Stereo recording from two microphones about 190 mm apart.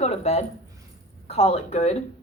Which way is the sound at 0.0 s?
35° left (ahead or behind).